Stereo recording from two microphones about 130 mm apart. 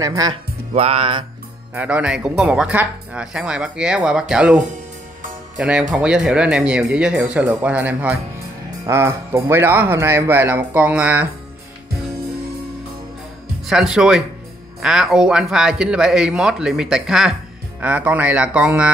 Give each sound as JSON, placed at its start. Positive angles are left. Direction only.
{"t": 0.0, "sound": "speech", "side_deg": -25}
{"t": 0.7, "sound": "speech", "side_deg": -45}
{"t": 1.7, "sound": "speech", "side_deg": -10}
{"t": 8.6, "sound": "speech", "side_deg": -20}
{"t": 13.7, "sound": "speech", "side_deg": -5}